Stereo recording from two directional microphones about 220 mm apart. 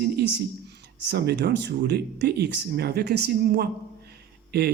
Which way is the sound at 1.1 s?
50° right (ahead or behind).